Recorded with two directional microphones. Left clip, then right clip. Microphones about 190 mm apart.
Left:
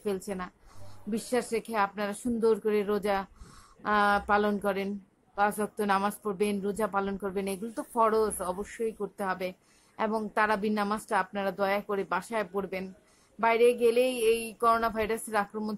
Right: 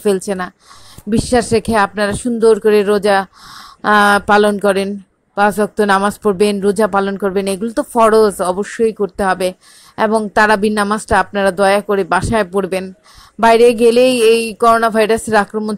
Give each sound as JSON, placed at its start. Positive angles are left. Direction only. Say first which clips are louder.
{"t": 0.0, "sound": "speech", "louder": "right 17 dB", "side_deg": -35}